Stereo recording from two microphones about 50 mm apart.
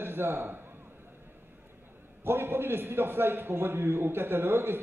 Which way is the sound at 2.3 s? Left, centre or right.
Right.